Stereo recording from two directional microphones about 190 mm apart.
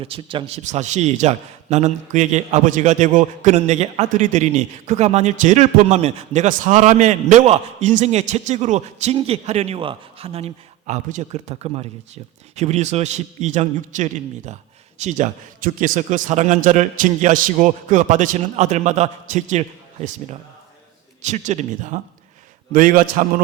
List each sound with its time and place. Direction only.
0.0 s a man's voice: 30° right (ahead or behind); by 23.2 s 45° right (ahead or behind)